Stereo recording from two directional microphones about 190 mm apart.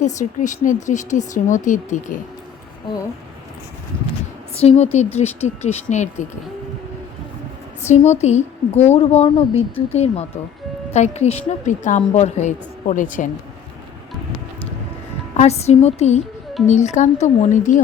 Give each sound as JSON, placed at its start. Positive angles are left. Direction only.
{"t": 0.0, "sound": "a woman's voice", "side_deg": 40}
{"t": 4.5, "sound": "a woman's voice", "side_deg": 35}
{"t": 7.8, "sound": "a woman's voice", "side_deg": 35}
{"t": 15.4, "sound": "a woman's voice", "side_deg": 35}